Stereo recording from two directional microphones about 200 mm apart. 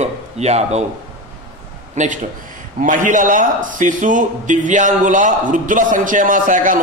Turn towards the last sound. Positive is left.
turn(degrees=-40)  # may be behind; listen again after turning